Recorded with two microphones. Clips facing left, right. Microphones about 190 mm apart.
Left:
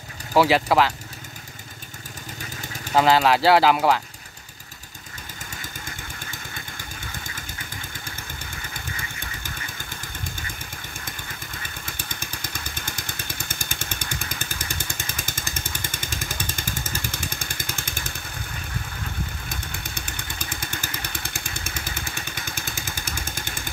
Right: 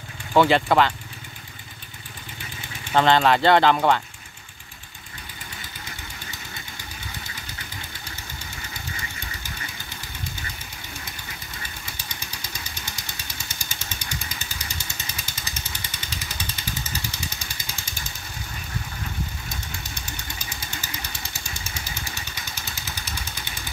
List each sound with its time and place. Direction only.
0.3 s speech: 5° left (ahead or behind)
2.9 s speech: 5° left (ahead or behind)
11.8 s motorcycle: 50° left (ahead or behind)
20.1 s motorcycle: 55° left (ahead or behind)